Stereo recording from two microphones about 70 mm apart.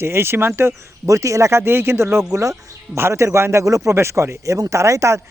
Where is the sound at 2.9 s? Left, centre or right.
Right.